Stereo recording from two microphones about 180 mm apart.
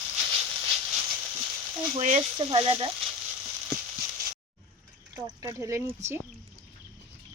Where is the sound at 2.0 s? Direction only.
35° right (ahead or behind).